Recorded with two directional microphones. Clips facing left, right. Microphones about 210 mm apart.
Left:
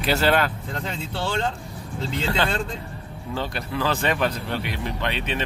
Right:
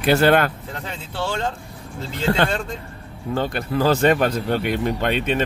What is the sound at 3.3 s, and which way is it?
Speech, 50° right (ahead or behind).